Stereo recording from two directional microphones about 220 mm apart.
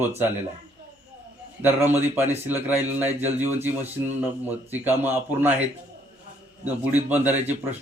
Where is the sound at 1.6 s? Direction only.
10° right (ahead or behind).